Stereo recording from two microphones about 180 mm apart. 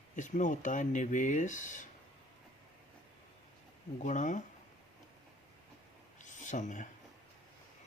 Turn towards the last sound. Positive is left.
turn(degrees=45)  # may be behind; listen again after turning